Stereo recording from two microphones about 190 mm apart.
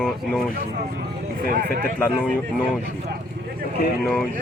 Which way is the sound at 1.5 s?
50° right (ahead or behind).